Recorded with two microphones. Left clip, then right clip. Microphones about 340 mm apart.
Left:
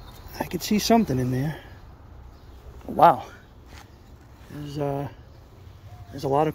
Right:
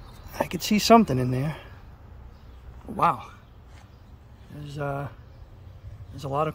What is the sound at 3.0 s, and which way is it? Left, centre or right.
Speech, centre.